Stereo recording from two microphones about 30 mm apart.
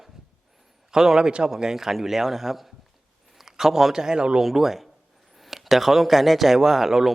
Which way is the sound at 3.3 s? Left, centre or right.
Centre.